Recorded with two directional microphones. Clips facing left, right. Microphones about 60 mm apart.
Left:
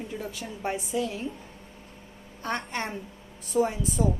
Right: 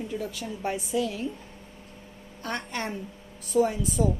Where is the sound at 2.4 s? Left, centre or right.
Left.